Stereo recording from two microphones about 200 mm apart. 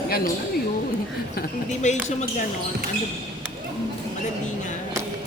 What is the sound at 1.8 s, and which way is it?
Speech, 35° left (ahead or behind).